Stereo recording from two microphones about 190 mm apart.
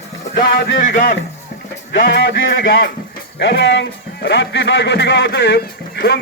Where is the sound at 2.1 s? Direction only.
70° left (ahead or behind).